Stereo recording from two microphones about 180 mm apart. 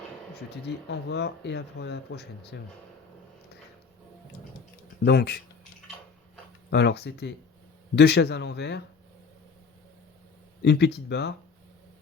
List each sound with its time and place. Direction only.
0.3 s speech: 70° left (ahead or behind)
5.0 s speech: 65° left (ahead or behind)
6.7 s speech: 70° left (ahead or behind)
10.6 s speech: 70° left (ahead or behind)